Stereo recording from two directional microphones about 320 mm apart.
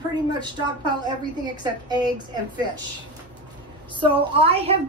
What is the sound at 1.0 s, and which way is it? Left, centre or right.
A woman's voice, centre.